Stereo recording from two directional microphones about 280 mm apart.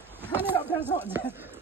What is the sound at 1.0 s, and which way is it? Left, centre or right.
Speech, centre.